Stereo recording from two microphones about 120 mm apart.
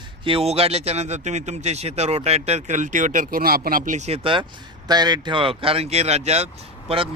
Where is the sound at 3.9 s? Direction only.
70° right (ahead or behind); by 4.5 s 45° right (ahead or behind).